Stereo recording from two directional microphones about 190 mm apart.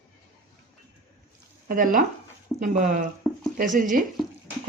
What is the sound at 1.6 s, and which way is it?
Speech, 45° right (ahead or behind).